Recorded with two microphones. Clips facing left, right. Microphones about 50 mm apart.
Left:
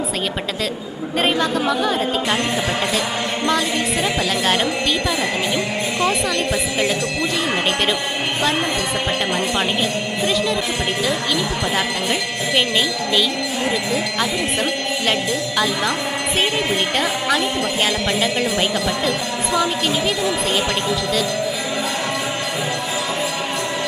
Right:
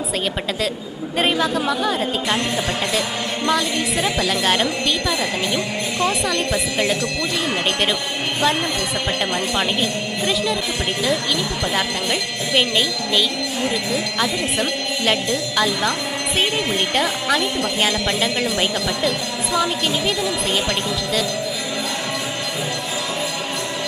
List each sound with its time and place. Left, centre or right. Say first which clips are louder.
1.1 s a woman's voice: even; centre
10.2 s a woman's voice: left 1 dB; centre